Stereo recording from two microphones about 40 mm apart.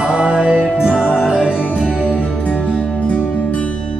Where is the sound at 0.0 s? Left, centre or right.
Right.